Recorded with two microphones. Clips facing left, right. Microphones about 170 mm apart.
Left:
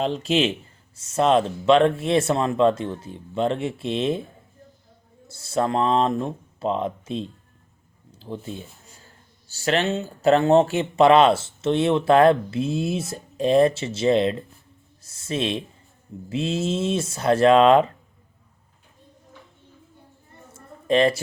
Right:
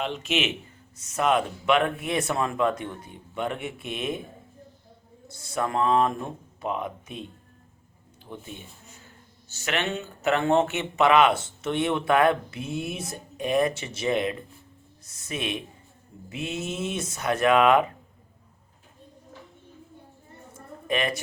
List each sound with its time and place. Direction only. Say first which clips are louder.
0.0 s speech: left 6 dB; 35° left (ahead or behind)
5.4 s speech: left 4 dB; 25° left (ahead or behind)
20.8 s speech: left 8 dB; 30° left (ahead or behind)